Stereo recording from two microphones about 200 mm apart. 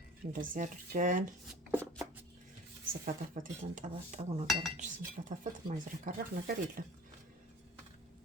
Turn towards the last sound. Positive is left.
turn(degrees=-45)  # may be behind; listen again after turning